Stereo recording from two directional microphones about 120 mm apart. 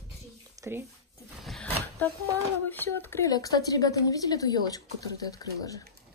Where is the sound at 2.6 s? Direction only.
15° left (ahead or behind).